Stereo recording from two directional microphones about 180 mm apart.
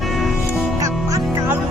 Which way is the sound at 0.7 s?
20° right (ahead or behind).